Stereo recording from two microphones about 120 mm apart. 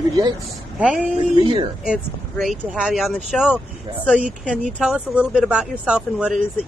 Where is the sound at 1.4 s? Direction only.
40° right (ahead or behind).